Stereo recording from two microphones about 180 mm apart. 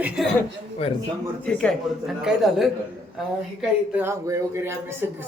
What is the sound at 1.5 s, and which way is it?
A man's voice, 5° left (ahead or behind).